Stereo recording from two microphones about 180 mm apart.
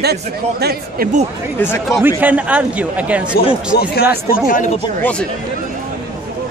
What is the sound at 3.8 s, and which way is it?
Speech, 60° left (ahead or behind).